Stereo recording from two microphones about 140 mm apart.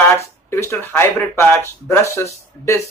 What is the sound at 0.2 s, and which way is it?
Speech, 20° left (ahead or behind).